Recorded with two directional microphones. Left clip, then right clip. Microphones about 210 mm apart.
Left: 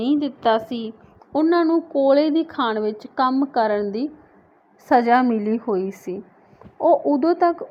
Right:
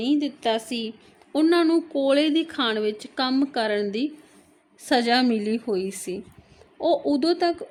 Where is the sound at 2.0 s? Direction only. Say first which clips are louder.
Left 4 dB; 25° right (ahead or behind).